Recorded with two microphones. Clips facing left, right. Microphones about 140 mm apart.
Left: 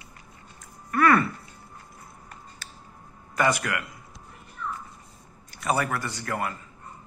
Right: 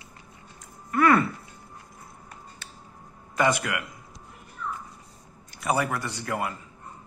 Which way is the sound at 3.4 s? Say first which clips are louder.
Even; 20° right (ahead or behind).